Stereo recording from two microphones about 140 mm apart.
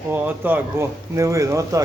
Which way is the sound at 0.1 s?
15° right (ahead or behind).